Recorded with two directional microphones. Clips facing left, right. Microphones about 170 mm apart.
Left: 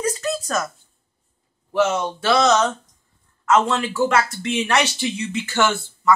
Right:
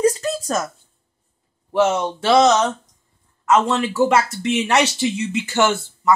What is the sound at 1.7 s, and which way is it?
Speech, 25° right (ahead or behind).